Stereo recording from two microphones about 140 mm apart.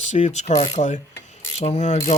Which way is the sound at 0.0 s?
55° left (ahead or behind).